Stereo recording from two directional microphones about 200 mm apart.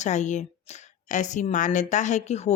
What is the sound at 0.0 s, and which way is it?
Speech, 35° left (ahead or behind).